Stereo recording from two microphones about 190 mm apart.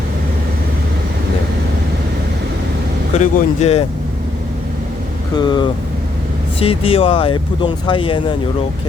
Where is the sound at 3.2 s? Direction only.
35° left (ahead or behind).